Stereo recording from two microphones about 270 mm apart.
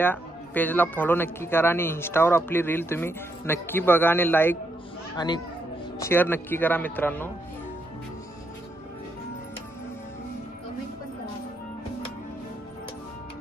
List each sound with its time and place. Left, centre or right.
0.0 s speech: centre